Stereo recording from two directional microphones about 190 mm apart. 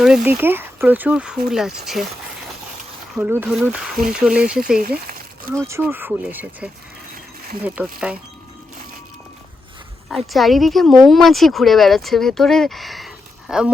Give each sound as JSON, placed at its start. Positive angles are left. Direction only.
{"t": 0.0, "sound": "speech", "side_deg": -5}
{"t": 3.2, "sound": "speech", "side_deg": -10}
{"t": 5.0, "sound": "a sound", "side_deg": -50}
{"t": 5.6, "sound": "speech", "side_deg": -10}
{"t": 7.9, "sound": "speech", "side_deg": -5}
{"t": 10.1, "sound": "speech", "side_deg": 0}